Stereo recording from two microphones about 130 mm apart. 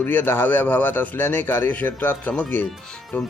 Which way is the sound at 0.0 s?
15° left (ahead or behind).